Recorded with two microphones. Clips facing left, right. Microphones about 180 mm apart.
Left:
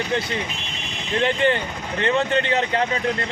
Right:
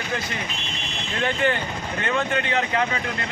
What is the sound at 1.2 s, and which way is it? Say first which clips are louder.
A man's voice: left 2 dB; 25° left (ahead or behind).